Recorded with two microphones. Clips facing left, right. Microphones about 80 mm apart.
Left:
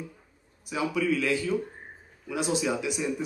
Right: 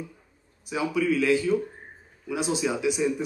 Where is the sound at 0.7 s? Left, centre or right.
Centre.